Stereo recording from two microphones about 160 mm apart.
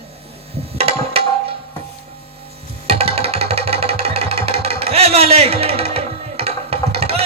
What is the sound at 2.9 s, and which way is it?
Music, 40° right (ahead or behind).